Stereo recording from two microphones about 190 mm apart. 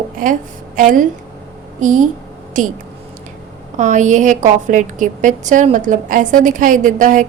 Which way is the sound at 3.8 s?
40° right (ahead or behind).